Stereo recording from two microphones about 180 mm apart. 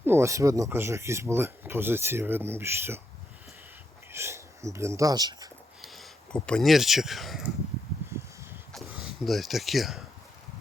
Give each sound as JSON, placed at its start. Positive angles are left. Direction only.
{"t": 0.0, "sound": "speech", "side_deg": -15}
{"t": 4.1, "sound": "speech", "side_deg": -15}
{"t": 5.8, "sound": "speech", "side_deg": 0}
{"t": 8.7, "sound": "a sound", "side_deg": 0}